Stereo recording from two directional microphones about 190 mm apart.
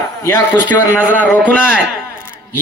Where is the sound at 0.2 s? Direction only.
15° left (ahead or behind).